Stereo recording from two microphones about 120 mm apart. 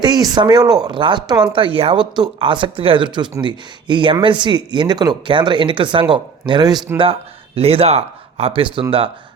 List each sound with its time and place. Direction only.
0.0 s speech: 35° right (ahead or behind)
6.9 s a man's voice: 50° right (ahead or behind)